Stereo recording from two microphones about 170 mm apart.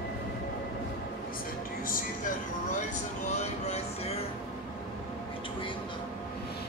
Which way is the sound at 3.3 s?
40° left (ahead or behind).